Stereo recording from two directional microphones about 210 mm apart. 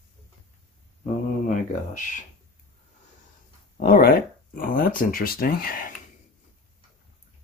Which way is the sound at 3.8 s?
45° left (ahead or behind).